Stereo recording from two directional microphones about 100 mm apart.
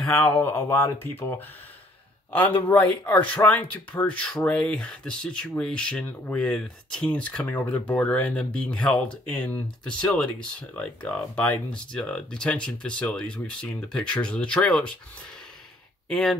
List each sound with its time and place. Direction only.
0.0 s speech: 15° left (ahead or behind)
0.4 s speech: 25° left (ahead or behind)
2.3 s speech: 15° left (ahead or behind)
16.1 s speech: 5° left (ahead or behind)